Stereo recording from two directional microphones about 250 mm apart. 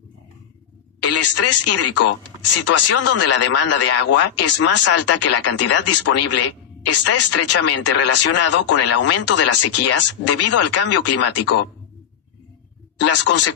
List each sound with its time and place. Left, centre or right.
1.0 s speech: left
13.0 s speech: left